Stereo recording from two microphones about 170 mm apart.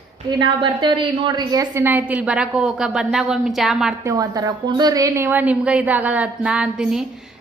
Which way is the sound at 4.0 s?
20° right (ahead or behind).